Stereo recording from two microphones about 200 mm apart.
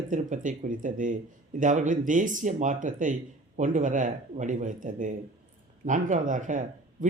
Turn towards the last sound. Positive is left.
turn(degrees=-40)  # may be behind; listen again after turning